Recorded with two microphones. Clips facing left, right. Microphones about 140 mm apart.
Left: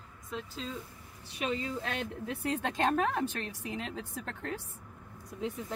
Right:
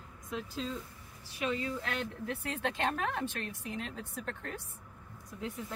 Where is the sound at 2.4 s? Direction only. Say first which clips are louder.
Left 4 dB; 40° left (ahead or behind).